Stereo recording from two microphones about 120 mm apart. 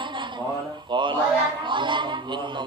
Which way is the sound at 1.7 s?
40° right (ahead or behind).